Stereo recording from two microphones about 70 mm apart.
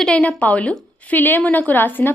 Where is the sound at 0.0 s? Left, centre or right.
Centre.